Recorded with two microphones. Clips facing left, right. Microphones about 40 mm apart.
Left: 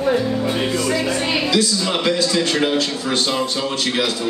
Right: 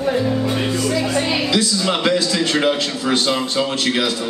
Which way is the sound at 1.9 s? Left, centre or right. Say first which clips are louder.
Left 1 dB; right.